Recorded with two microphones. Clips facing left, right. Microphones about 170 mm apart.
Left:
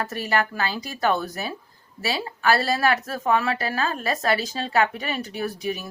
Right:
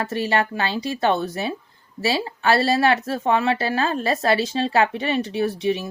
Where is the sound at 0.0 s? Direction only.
30° right (ahead or behind).